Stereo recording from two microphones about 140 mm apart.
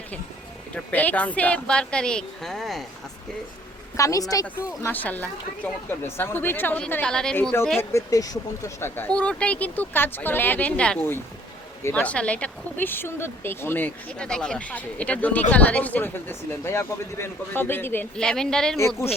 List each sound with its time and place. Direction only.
0.7 s speech: 10° left (ahead or behind)
3.9 s speech: 25° left (ahead or behind)
4.8 s speech: 10° left (ahead or behind)
7.8 s speech: 20° left (ahead or behind)
9.0 s speech: 10° left (ahead or behind)